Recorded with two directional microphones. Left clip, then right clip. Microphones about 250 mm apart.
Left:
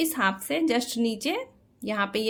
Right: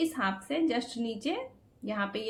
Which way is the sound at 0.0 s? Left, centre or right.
Left.